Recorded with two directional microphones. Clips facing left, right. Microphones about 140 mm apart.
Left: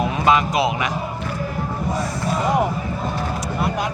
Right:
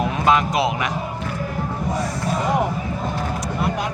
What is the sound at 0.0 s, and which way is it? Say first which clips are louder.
Speech: left 1 dB; 5° left (ahead or behind).